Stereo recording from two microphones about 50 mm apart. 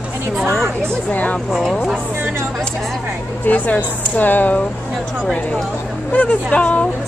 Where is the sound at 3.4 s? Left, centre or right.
Left.